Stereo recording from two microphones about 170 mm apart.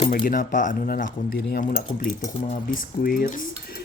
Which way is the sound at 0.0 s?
50° left (ahead or behind).